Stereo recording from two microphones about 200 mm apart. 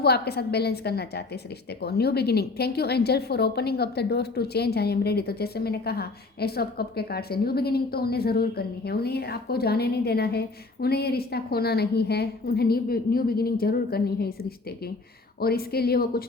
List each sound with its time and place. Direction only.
0.0 s a woman's voice: 55° left (ahead or behind)
15.4 s a woman's voice: 50° left (ahead or behind)